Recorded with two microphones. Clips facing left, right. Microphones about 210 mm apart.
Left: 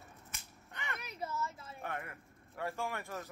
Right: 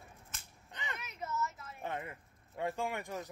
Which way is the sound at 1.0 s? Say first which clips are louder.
Right 1 dB; 35° left (ahead or behind).